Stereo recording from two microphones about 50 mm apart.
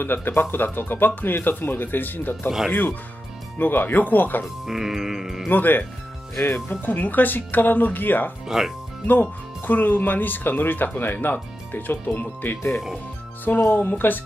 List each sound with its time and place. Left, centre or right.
0.0 s speech: left
3.5 s speech: left
4.6 s music: centre
5.5 s speech: left
8.5 s speech: centre
9.0 s speech: left
13.5 s speech: left
13.8 s speech: left